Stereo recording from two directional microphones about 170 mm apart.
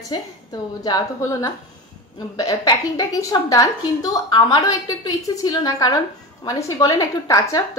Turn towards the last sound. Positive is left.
turn(degrees=20)  # may be behind; listen again after turning